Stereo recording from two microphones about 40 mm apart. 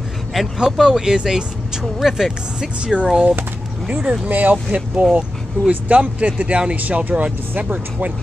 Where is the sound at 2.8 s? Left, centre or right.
Right.